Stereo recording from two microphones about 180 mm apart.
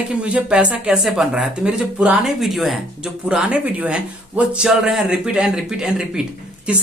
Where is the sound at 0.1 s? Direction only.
5° right (ahead or behind).